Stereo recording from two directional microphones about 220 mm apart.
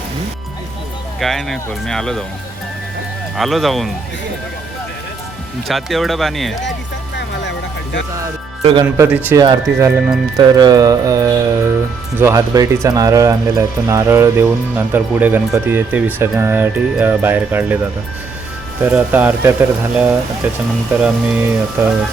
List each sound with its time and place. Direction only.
1.2 s speech: centre (ahead or behind)
3.3 s speech: centre (ahead or behind)
5.6 s speech: centre (ahead or behind)
8.6 s speech: 20° right (ahead or behind)
9.0 s speech: 5° right (ahead or behind)
18.8 s speech: 10° right (ahead or behind)